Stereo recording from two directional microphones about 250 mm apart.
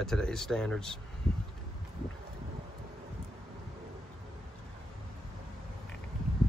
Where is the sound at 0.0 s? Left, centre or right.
Centre.